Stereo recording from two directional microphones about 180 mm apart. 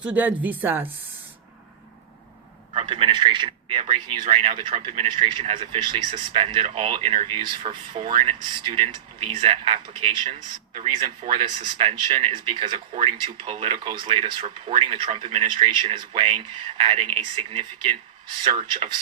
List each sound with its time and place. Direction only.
0.0 s a woman's voice: 10° right (ahead or behind)
2.7 s speech: 35° right (ahead or behind)